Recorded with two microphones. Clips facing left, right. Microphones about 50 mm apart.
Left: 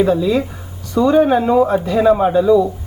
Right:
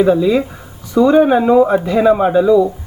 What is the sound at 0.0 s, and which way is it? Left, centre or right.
Speech, centre.